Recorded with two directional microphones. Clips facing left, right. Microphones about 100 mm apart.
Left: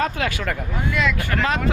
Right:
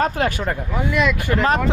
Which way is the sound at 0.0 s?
40° right (ahead or behind).